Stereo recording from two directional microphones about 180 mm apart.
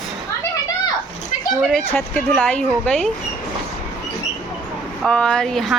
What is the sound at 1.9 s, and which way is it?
Speech, 10° left (ahead or behind).